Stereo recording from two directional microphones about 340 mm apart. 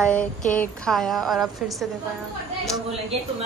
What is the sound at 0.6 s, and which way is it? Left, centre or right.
Speech, centre.